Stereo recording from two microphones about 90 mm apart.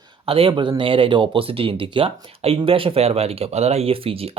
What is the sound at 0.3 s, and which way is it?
Speech, 85° right.